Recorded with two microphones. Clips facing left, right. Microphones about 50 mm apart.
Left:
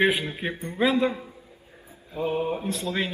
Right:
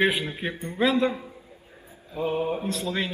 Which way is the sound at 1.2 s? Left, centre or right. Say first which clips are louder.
Even; centre.